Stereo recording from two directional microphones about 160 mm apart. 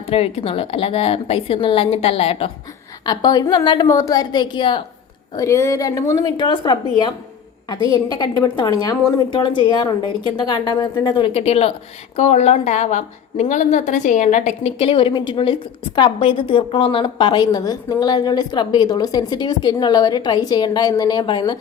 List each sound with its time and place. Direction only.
0.1 s a woman's voice: 40° left (ahead or behind)
3.1 s a woman's voice: 25° left (ahead or behind)
5.4 s a woman's voice: 20° left (ahead or behind)